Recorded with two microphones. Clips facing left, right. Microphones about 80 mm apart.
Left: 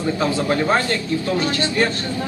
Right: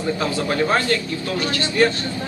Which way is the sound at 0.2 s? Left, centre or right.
Centre.